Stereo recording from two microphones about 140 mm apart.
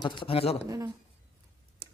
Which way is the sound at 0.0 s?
35° left (ahead or behind).